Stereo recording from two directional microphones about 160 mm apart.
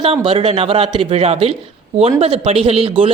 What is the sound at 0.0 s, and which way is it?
Speech, 35° right (ahead or behind).